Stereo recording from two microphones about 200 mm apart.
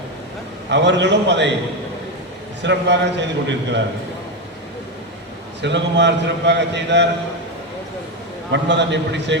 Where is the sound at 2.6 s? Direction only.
60° right (ahead or behind).